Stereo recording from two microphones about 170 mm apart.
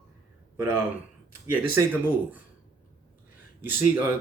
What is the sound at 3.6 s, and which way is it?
Speech, 10° right (ahead or behind).